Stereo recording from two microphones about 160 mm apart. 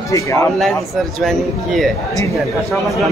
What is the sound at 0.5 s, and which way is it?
A man's voice, centre (ahead or behind).